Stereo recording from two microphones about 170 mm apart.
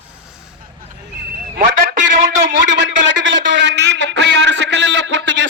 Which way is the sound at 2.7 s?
90° right.